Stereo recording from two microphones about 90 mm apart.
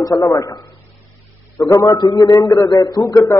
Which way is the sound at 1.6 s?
40° left (ahead or behind).